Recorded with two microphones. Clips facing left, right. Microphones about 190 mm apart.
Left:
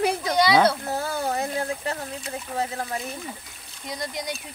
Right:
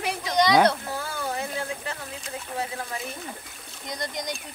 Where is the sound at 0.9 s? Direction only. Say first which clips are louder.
Left 4 dB; 40° left (ahead or behind).